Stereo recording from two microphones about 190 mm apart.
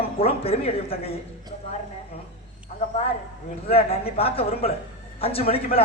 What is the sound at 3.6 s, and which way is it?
A man's voice, 30° left (ahead or behind).